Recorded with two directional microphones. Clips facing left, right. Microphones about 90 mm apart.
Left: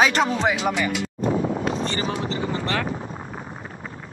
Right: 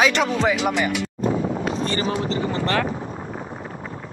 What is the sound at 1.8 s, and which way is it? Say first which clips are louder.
Speech: right 2 dB; 20° left (ahead or behind).